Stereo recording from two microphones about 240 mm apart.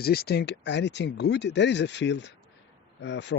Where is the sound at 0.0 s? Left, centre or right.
Left.